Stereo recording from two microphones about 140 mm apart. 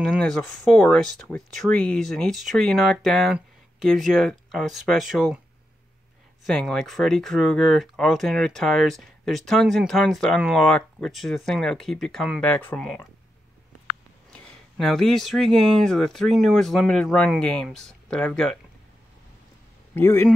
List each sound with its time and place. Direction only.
0.0 s speech: 5° left (ahead or behind)
6.4 s speech: centre (ahead or behind)
14.3 s speech: 5° left (ahead or behind)
19.9 s a man's voice: 15° left (ahead or behind)